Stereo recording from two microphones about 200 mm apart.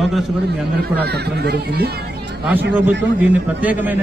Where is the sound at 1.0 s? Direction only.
55° right (ahead or behind).